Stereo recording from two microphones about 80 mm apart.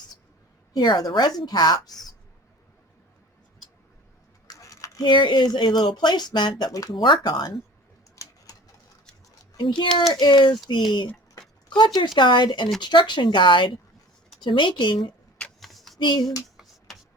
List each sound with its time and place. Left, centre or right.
0.7 s speech: left
1.9 s speech: centre
4.4 s a sound: left
5.0 s speech: left
7.0 s speech: left
8.1 s a sound: left
9.6 s speech: left
10.1 s speech: left
11.9 s speech: left
15.4 s a sound: centre
16.0 s speech: left